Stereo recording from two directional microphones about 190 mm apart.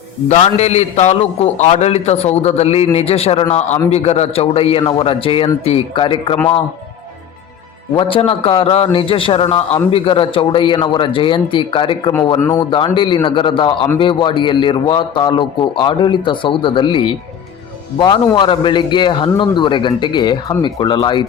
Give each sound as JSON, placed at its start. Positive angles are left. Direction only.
{"t": 0.3, "sound": "a man's voice", "side_deg": 35}
{"t": 7.9, "sound": "a man's voice", "side_deg": 30}
{"t": 12.4, "sound": "speech", "side_deg": 15}
{"t": 12.7, "sound": "a man's voice", "side_deg": 25}